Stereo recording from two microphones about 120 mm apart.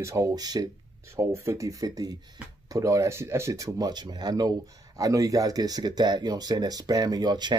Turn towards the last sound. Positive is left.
turn(degrees=-35)  # may be behind; listen again after turning